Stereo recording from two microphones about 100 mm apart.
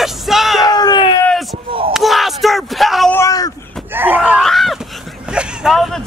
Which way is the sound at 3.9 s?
20° right (ahead or behind).